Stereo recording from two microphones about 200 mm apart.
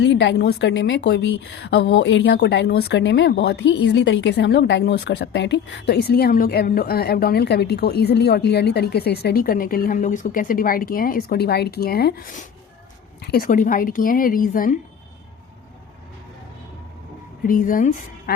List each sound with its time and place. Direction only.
0.0 s a woman's voice: 65° left (ahead or behind); by 14.8 s 45° left (ahead or behind)
17.4 s a woman's voice: 45° left (ahead or behind)